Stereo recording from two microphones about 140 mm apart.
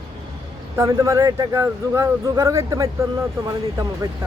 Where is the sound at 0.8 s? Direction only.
20° right (ahead or behind).